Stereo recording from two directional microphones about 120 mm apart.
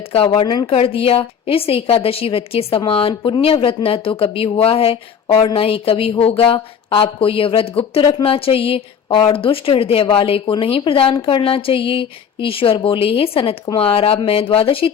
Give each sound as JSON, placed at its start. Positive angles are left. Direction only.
{"t": 0.1, "sound": "a woman's voice", "side_deg": 50}